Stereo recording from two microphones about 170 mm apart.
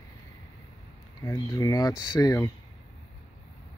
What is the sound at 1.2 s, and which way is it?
Speech, 20° left (ahead or behind).